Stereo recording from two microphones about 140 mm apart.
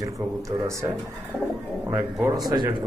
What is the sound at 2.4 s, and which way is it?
Speech, 35° right (ahead or behind).